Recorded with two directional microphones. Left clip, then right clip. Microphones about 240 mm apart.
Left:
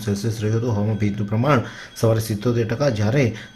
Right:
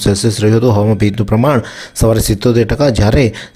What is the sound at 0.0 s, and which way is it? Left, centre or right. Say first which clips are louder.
Speech: right 13 dB; right.